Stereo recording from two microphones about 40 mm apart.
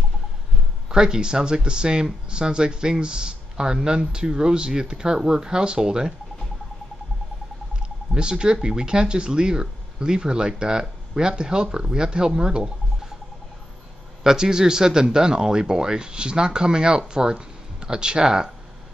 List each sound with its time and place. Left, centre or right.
0.8 s speech: centre
7.8 s speech: right
14.2 s speech: centre